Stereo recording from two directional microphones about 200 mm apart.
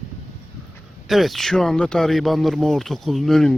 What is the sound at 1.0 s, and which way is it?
Speech, centre (ahead or behind).